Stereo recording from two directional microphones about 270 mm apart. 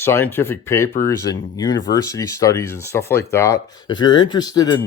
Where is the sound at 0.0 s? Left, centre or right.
Centre.